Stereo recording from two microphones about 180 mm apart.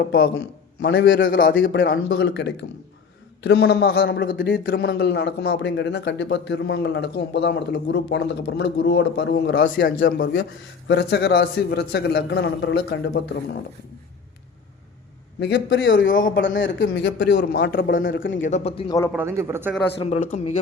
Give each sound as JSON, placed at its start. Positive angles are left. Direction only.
{"t": 0.8, "sound": "a man's voice", "side_deg": 70}
{"t": 1.7, "sound": "a man's voice", "side_deg": 90}
{"t": 10.0, "sound": "a man's voice", "side_deg": 60}
{"t": 10.8, "sound": "speech", "side_deg": 70}
{"t": 15.4, "sound": "speech", "side_deg": 65}
{"t": 18.4, "sound": "speech", "side_deg": 40}
{"t": 18.9, "sound": "a man's voice", "side_deg": 15}
{"t": 19.1, "sound": "a man's voice", "side_deg": -15}
{"t": 20.0, "sound": "speech", "side_deg": 35}